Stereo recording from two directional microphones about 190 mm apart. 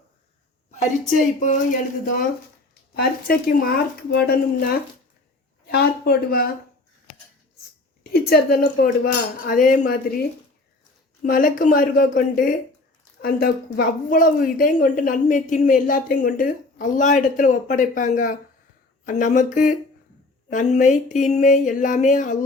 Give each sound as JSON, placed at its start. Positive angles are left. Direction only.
{"t": 0.7, "sound": "speech", "side_deg": 40}
{"t": 2.9, "sound": "a woman's voice", "side_deg": 50}
{"t": 8.1, "sound": "a woman's voice", "side_deg": 55}
{"t": 9.5, "sound": "a woman's voice", "side_deg": 45}
{"t": 11.2, "sound": "a woman's voice", "side_deg": 45}